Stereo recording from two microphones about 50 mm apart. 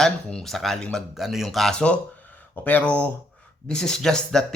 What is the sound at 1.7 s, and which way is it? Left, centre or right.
A man's voice, left.